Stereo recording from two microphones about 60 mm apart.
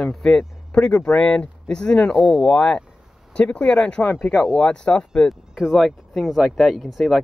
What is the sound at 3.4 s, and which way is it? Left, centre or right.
Speech, left.